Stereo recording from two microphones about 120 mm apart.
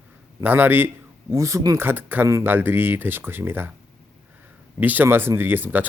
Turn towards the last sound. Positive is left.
turn(degrees=-15)  # may be behind; listen again after turning